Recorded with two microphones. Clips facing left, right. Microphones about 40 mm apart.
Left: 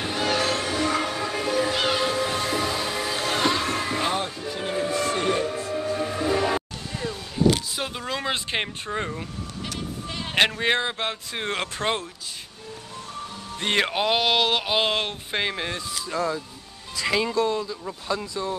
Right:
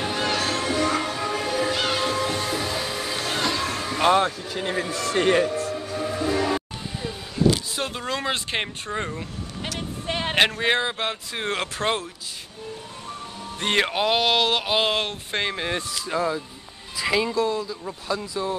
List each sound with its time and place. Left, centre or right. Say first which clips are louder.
0.0 s music: even; centre
3.6 s music: left 1 dB; centre
4.0 s music: right 7 dB; right
4.8 s a sound: left 3 dB; centre
5.1 s speech: right 4 dB; right
5.6 s music: left 1 dB; centre
7.7 s speech: right 2 dB; centre
10.0 s a sound: right 6 dB; right
10.6 s speech: right 1 dB; centre
13.6 s speech: right 1 dB; centre
16.2 s speech: right 1 dB; centre
16.9 s music: right 1 dB; centre
17.3 s speech: even; centre